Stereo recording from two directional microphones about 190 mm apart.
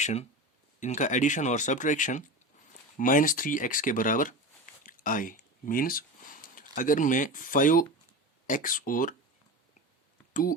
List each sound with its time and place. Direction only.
0.0 s speech: 35° left (ahead or behind)